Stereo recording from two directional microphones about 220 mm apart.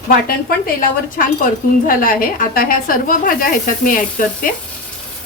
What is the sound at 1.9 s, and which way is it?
Speech, 40° left (ahead or behind).